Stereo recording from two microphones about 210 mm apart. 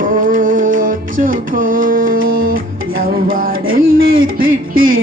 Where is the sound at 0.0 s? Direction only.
40° right (ahead or behind).